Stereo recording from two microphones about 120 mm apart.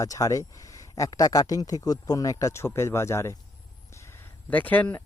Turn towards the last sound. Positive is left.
turn(degrees=15)  # may be behind; listen again after turning